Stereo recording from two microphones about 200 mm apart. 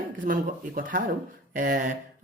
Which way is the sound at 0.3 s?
45° right (ahead or behind).